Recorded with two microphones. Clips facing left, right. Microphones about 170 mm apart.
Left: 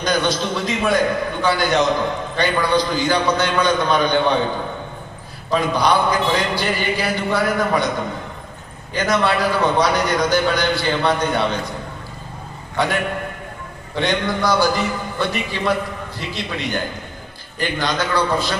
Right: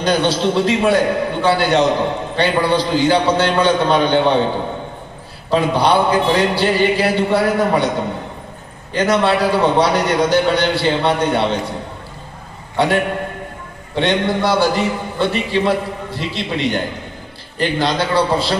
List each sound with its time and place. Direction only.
0.0 s a man's voice: 30° right (ahead or behind)
8.9 s a man's voice: 30° right (ahead or behind)
12.7 s a man's voice: 25° right (ahead or behind)